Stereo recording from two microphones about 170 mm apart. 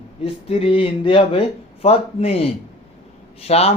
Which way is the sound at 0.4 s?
35° left (ahead or behind).